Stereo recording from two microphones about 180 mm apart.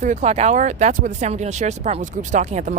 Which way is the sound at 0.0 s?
40° right (ahead or behind).